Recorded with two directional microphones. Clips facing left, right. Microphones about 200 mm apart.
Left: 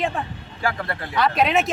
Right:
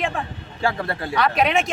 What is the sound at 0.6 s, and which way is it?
Speech, 25° right (ahead or behind).